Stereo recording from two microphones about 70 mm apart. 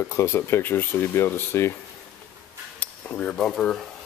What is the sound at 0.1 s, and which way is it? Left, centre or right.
Speech, left.